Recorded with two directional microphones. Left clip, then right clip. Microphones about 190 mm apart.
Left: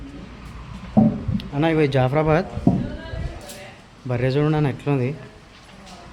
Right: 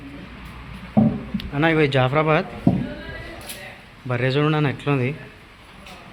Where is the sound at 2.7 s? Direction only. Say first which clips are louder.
Left 1 dB; 15° right (ahead or behind).